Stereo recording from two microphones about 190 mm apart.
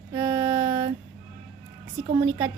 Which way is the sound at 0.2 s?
20° right (ahead or behind).